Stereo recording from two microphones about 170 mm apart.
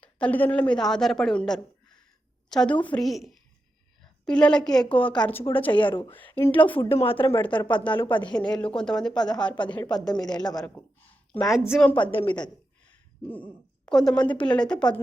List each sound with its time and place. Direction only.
0.0 s a woman's voice: 10° left (ahead or behind)
5.7 s a woman's voice: 30° left (ahead or behind)
6.1 s speech: 10° left (ahead or behind)
6.9 s a woman's voice: 35° left (ahead or behind)
8.5 s a woman's voice: 5° left (ahead or behind)
10.2 s a woman's voice: 25° left (ahead or behind)
11.3 s a woman's voice: centre (ahead or behind)
11.9 s a woman's voice: 30° left (ahead or behind)
12.9 s a woman's voice: 10° left (ahead or behind)